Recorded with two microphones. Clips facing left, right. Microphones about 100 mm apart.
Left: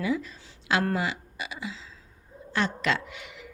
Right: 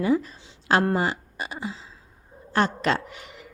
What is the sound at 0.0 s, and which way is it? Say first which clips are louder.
A woman's voice: right 6 dB; 40° right (ahead or behind).